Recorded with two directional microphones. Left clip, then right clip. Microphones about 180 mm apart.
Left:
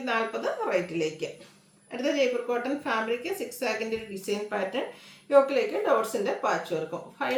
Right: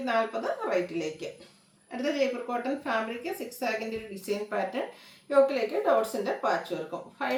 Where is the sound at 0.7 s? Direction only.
15° left (ahead or behind).